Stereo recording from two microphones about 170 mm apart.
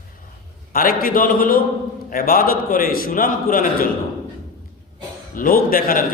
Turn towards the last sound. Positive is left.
turn(degrees=55)  # may be behind; listen again after turning